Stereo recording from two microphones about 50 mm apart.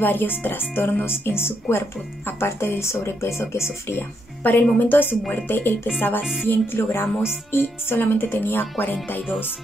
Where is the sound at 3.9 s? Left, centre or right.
Left.